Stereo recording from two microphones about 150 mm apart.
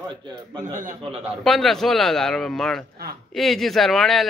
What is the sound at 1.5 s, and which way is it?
A man's voice, centre (ahead or behind).